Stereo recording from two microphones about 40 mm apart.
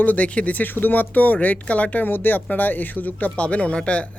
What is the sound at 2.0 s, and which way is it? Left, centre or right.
A woman's voice, left.